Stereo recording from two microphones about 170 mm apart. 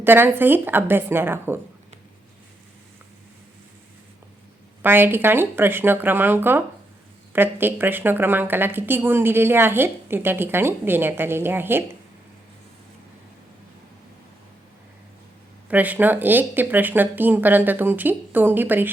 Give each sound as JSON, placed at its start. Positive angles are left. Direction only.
{"t": 0.0, "sound": "a woman's voice", "side_deg": -10}
{"t": 4.8, "sound": "a woman's voice", "side_deg": -10}
{"t": 15.7, "sound": "a woman's voice", "side_deg": -10}